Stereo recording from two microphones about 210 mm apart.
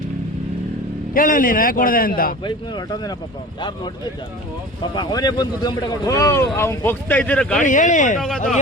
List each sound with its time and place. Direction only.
1.1 s a man's voice: 40° left (ahead or behind)
2.4 s speech: 20° left (ahead or behind)
4.8 s speech: 20° left (ahead or behind)
7.6 s a man's voice: 40° left (ahead or behind)